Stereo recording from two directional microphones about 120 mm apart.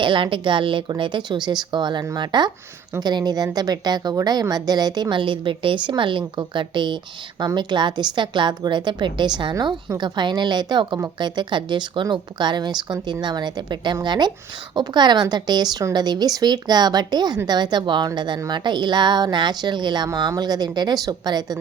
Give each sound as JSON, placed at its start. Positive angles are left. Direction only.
{"t": 0.0, "sound": "a woman's voice", "side_deg": -45}